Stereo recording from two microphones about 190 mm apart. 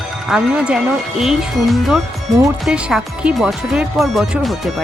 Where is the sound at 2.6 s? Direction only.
5° right (ahead or behind).